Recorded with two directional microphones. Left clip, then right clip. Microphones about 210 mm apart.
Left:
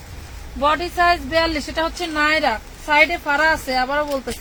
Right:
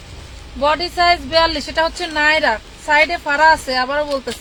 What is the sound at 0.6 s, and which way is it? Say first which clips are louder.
Speech: right 2 dB; 25° right (ahead or behind).